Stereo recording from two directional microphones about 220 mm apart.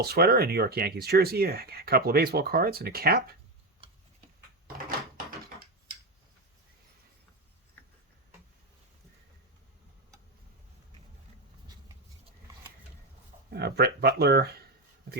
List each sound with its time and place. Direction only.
0.0 s speech: 45° right (ahead or behind)
4.9 s door: 40° right (ahead or behind)
13.5 s a sound: 45° right (ahead or behind)